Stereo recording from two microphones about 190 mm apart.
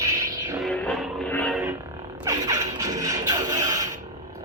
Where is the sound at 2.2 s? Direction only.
20° right (ahead or behind).